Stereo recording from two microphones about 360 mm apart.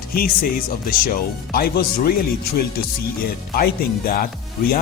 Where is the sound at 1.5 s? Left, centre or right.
Left.